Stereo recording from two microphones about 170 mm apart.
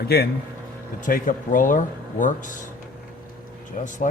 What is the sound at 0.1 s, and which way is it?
Speech, 65° left (ahead or behind).